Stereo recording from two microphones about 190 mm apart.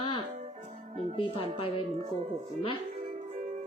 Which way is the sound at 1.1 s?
30° left (ahead or behind).